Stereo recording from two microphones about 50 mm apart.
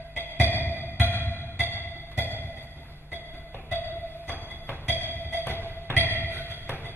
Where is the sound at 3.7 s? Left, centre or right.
Left.